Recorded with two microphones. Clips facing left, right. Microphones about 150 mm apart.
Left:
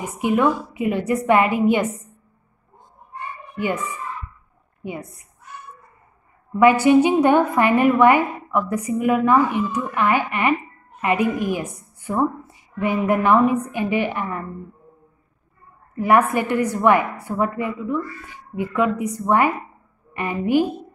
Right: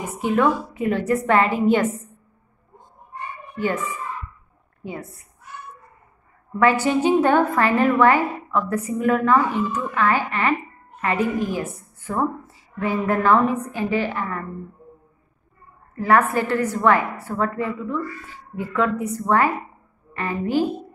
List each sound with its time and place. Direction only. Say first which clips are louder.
0.2 s a woman's voice: left 1 dB; 10° left (ahead or behind)
3.5 s a woman's voice: even; 15° left (ahead or behind)
6.6 s a woman's voice: left 5 dB; 15° left (ahead or behind)
15.9 s a woman's voice: left 1 dB; 15° left (ahead or behind)